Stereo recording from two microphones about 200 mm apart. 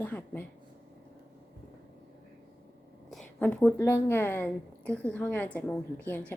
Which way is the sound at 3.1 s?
5° left (ahead or behind).